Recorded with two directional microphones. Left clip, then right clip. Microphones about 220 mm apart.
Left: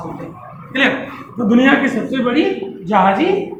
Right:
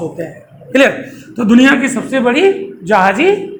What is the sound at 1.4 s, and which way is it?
Speech, 50° right (ahead or behind).